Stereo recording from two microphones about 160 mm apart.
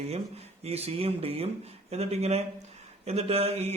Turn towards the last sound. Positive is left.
turn(degrees=-40)  # may be behind; listen again after turning